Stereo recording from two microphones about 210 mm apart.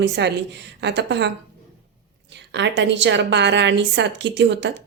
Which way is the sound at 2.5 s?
55° right (ahead or behind).